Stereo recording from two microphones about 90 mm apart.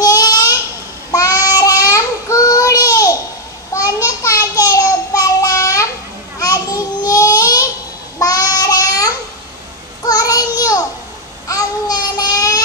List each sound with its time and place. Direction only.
0.0 s a sound: 40° left (ahead or behind)
1.1 s child singing: 40° left (ahead or behind)
6.4 s babbling: 40° left (ahead or behind)
8.2 s child singing: 40° left (ahead or behind)
11.4 s babbling: 45° left (ahead or behind)